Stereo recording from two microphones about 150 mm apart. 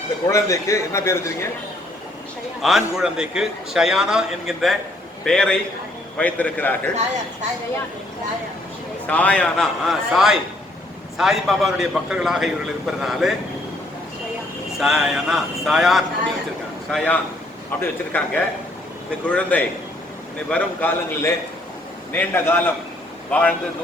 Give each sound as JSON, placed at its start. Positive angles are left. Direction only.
{"t": 0.3, "sound": "a man's voice", "side_deg": 20}
{"t": 2.6, "sound": "a man's voice", "side_deg": 0}
{"t": 9.0, "sound": "a man's voice", "side_deg": 10}
{"t": 14.8, "sound": "a man's voice", "side_deg": -5}